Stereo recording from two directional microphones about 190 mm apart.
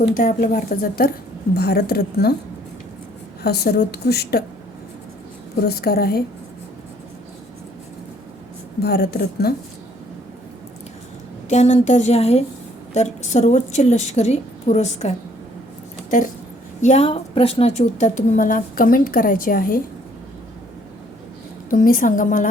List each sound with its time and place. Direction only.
0.0 s a woman's voice: 45° left (ahead or behind)
3.4 s a woman's voice: 60° left (ahead or behind)
5.6 s a woman's voice: 55° left (ahead or behind)
8.8 s a woman's voice: 55° left (ahead or behind)
11.4 s a woman's voice: 35° left (ahead or behind)
16.8 s a woman's voice: 35° left (ahead or behind)
21.7 s speech: 45° left (ahead or behind)